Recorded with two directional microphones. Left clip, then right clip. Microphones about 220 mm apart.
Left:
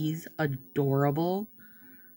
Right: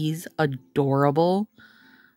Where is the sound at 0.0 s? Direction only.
50° right (ahead or behind).